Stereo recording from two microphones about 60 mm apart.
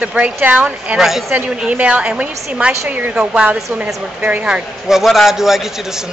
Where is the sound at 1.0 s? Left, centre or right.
Centre.